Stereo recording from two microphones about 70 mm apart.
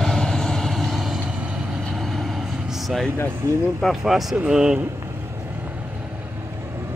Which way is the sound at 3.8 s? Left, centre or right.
Centre.